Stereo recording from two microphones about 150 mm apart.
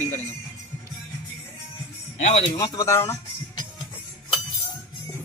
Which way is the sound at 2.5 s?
25° left (ahead or behind).